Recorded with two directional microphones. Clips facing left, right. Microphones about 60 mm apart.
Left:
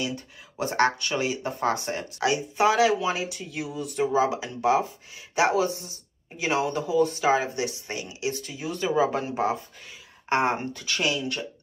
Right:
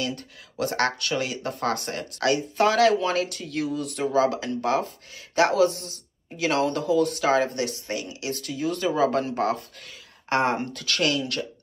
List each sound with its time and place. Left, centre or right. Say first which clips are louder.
0.0 s speech: right 1 dB; centre
10.3 s speech: right 1 dB; left